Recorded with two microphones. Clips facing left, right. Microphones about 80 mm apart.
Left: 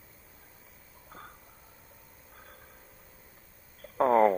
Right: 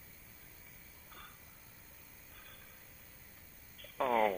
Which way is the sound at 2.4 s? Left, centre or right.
Left.